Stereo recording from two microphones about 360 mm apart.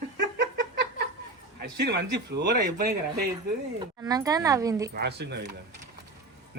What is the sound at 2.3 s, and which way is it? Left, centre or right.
Speech, right.